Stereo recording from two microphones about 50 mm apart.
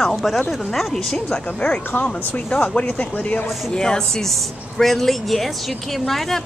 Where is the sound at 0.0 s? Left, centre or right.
Centre.